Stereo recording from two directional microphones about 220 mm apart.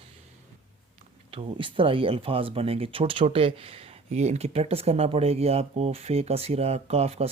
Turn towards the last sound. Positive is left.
turn(degrees=-30)  # may be behind; listen again after turning